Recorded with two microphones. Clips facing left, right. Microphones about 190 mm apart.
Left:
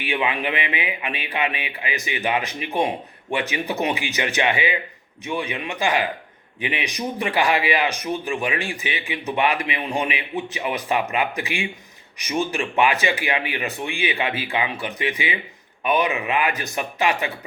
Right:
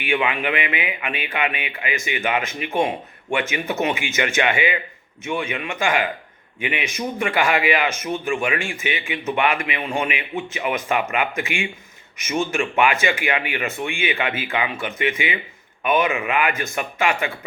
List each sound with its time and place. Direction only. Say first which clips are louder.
0.3 s a man's voice: right 1 dB; 35° left (ahead or behind)